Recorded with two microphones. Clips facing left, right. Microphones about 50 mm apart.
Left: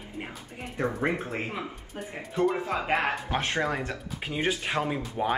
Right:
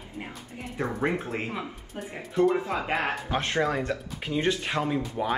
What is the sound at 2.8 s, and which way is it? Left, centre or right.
Speech, left.